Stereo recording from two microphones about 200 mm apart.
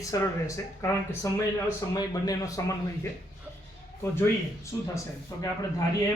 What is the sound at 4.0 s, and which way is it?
Speech, 15° left (ahead or behind).